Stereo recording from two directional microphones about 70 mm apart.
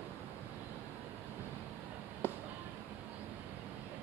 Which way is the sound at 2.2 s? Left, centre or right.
Left.